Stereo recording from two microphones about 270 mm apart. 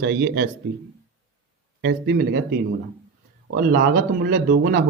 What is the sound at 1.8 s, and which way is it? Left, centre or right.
Speech, right.